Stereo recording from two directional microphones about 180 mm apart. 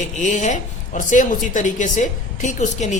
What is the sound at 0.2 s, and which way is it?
Speech, 40° left (ahead or behind).